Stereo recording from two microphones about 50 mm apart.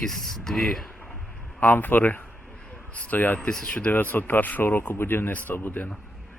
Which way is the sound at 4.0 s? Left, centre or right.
Left.